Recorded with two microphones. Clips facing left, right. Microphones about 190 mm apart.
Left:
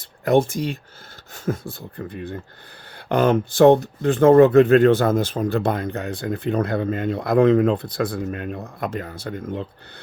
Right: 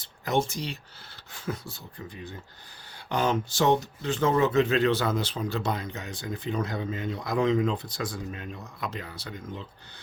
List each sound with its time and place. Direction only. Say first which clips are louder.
0.0 s speech: left 9 dB; 55° left (ahead or behind)